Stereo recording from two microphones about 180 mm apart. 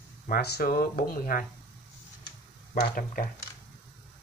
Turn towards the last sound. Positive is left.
turn(degrees=50)  # may be behind; listen again after turning